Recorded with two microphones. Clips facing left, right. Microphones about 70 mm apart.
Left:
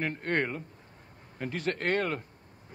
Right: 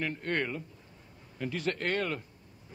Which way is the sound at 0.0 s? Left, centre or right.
Left.